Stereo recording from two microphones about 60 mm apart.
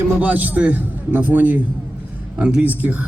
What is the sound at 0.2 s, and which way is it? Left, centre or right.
A man's voice, right.